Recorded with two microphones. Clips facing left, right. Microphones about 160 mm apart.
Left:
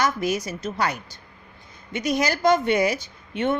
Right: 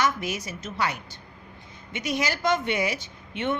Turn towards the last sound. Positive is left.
turn(degrees=40)  # may be behind; listen again after turning